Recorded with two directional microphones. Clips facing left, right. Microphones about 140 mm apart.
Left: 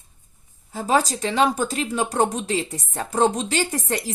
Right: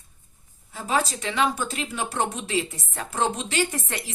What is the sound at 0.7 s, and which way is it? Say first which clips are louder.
Speech: left 5 dB; 35° left (ahead or behind).